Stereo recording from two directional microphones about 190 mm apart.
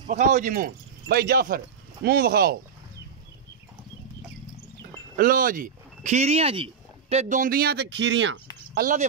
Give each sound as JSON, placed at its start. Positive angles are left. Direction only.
{"t": 0.1, "sound": "speech", "side_deg": -40}
{"t": 5.1, "sound": "speech", "side_deg": -45}
{"t": 8.7, "sound": "speech", "side_deg": -45}